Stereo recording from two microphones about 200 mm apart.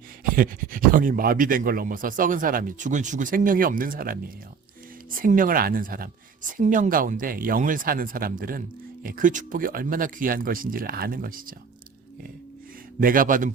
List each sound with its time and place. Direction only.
0.3 s speech: 45° right (ahead or behind)
5.2 s speech: 40° right (ahead or behind)
13.0 s speech: 45° right (ahead or behind)